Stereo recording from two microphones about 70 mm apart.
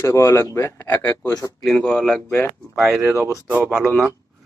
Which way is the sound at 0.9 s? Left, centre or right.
Left.